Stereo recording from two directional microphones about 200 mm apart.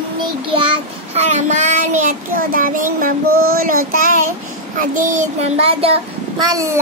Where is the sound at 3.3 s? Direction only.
90° right.